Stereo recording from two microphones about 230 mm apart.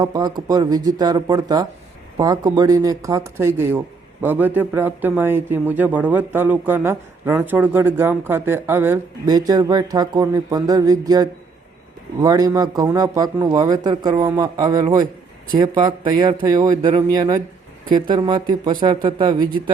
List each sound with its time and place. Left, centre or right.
0.0 s a man's voice: centre